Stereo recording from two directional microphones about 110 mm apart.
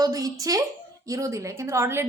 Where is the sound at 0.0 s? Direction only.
35° right (ahead or behind).